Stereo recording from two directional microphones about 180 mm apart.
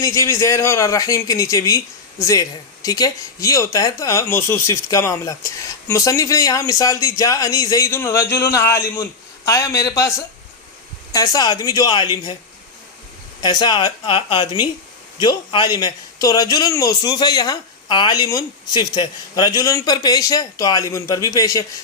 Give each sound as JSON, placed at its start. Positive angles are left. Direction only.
{"t": 0.0, "sound": "a man's voice", "side_deg": 15}
{"t": 13.4, "sound": "a man's voice", "side_deg": 25}